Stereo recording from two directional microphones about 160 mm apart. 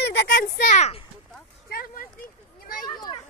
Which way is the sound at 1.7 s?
65° left (ahead or behind).